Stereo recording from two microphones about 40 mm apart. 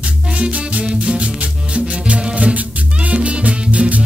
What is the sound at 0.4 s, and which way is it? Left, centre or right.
Music, right.